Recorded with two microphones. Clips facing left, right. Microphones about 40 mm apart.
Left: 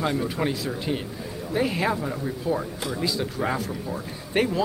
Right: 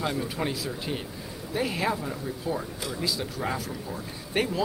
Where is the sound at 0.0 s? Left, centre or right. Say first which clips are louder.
Left 4 dB; centre.